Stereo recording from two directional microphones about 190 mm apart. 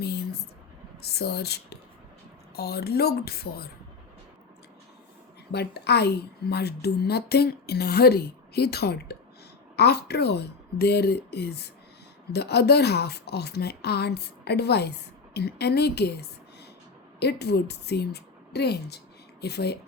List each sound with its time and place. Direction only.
0.0 s a sound: 55° left (ahead or behind)
1.0 s speech: 55° left (ahead or behind)
5.5 s speech: 60° left (ahead or behind)